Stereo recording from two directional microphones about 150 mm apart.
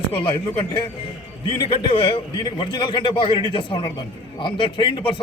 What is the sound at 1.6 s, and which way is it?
A man's voice, 35° left (ahead or behind).